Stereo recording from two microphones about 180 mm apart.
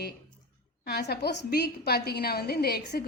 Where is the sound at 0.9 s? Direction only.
60° left (ahead or behind).